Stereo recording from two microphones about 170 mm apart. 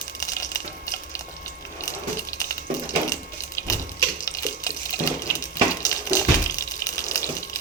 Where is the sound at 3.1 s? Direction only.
20° left (ahead or behind).